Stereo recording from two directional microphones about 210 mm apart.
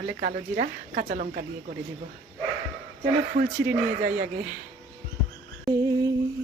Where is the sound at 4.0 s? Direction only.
45° right (ahead or behind).